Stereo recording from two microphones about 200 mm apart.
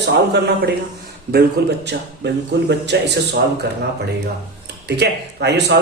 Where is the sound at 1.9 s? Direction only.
60° right (ahead or behind).